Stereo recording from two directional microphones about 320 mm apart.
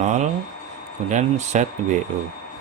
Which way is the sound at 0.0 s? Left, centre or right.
Right.